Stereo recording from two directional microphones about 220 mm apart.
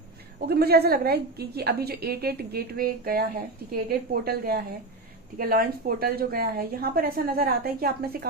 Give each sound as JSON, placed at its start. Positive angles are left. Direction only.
{"t": 0.4, "sound": "a woman's voice", "side_deg": -45}